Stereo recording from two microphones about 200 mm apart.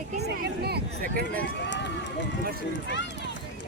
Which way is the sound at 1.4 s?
65° left (ahead or behind).